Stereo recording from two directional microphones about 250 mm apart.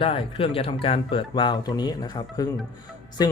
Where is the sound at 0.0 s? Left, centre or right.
Left.